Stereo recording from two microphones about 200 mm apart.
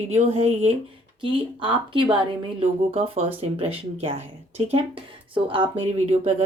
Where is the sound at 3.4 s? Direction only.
30° right (ahead or behind).